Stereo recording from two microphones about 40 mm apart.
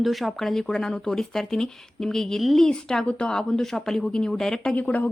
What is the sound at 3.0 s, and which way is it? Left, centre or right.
Speech, left.